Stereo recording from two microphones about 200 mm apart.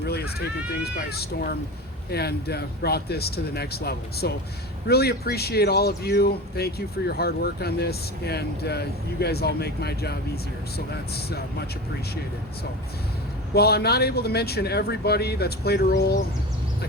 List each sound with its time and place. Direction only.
0.0 s cat: 55° left (ahead or behind)
0.9 s speech: 50° left (ahead or behind)
11.3 s speech: 50° left (ahead or behind)
13.5 s speech: 50° left (ahead or behind)